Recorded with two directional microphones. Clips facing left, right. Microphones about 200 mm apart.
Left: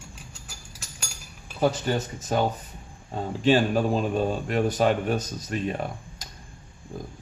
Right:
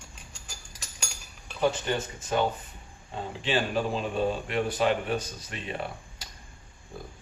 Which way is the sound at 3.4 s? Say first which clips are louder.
Left 7 dB; 45° left (ahead or behind).